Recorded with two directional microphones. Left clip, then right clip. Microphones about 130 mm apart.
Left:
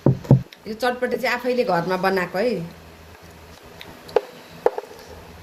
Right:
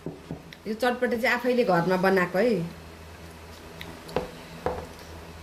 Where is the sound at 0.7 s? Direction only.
20° right (ahead or behind).